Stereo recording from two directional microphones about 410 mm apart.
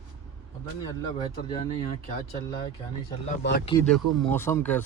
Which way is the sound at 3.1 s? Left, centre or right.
Left.